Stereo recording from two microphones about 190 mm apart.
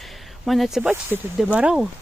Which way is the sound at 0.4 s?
Centre (ahead or behind).